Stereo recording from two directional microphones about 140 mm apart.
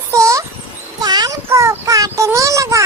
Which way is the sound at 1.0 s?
30° right (ahead or behind).